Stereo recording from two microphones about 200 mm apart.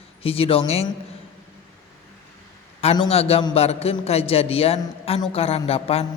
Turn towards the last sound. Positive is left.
turn(degrees=30)  # may be behind; listen again after turning